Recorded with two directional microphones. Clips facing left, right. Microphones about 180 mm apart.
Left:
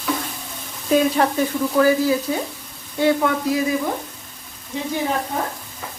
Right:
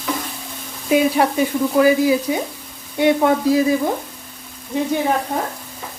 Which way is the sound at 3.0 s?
20° right (ahead or behind).